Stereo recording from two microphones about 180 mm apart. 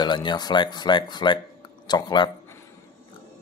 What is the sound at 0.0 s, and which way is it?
Speech, 25° left (ahead or behind).